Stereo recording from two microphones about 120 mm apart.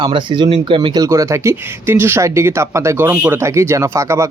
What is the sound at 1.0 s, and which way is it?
Speech, 25° right (ahead or behind).